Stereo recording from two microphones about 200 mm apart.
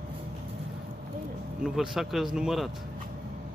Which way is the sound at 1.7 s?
Centre (ahead or behind).